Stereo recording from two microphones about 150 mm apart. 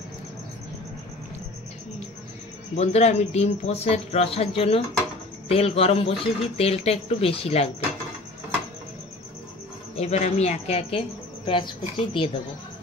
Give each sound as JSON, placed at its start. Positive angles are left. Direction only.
{"t": 2.7, "sound": "a woman's voice", "side_deg": 45}
{"t": 9.9, "sound": "a woman's voice", "side_deg": 45}